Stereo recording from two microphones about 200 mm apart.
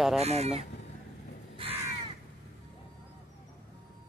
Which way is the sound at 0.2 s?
30° right (ahead or behind).